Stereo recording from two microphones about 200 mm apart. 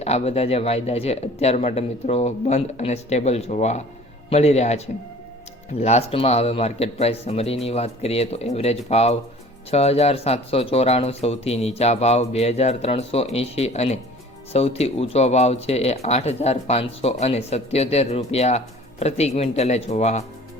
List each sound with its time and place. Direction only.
0.0 s speech: 30° left (ahead or behind)
5.8 s speech: 30° left (ahead or behind)